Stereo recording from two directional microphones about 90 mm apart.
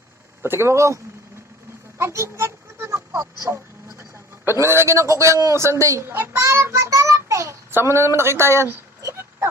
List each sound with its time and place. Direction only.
0.4 s speech: 30° right (ahead or behind)
2.0 s a sound: 30° right (ahead or behind)
4.5 s a man's voice: 30° right (ahead or behind)